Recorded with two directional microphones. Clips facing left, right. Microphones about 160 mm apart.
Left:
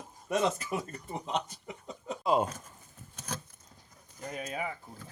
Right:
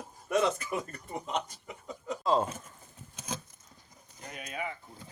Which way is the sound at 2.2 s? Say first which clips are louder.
Even; 15° left (ahead or behind).